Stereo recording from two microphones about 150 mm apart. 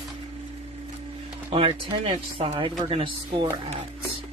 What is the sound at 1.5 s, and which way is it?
Speech, 40° right (ahead or behind).